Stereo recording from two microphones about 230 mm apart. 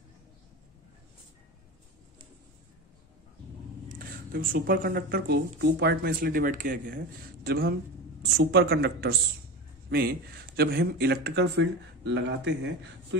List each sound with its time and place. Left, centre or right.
3.9 s speech: right